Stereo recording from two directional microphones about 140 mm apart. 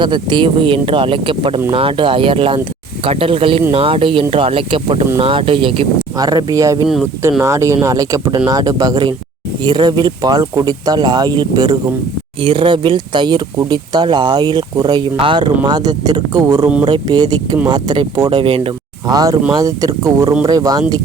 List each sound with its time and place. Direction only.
0.0 s speech: 35° right (ahead or behind)
6.1 s speech: 25° right (ahead or behind)